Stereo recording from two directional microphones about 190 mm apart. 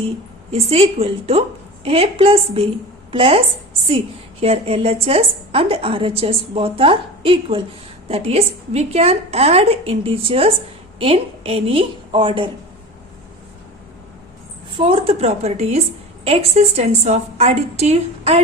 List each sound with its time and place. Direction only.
0.5 s a woman's voice: 30° right (ahead or behind)
14.8 s a woman's voice: 30° right (ahead or behind)